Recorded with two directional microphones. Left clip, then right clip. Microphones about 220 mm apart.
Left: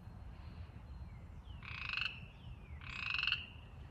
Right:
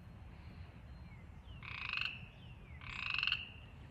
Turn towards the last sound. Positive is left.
turn(degrees=-35)  # may be behind; listen again after turning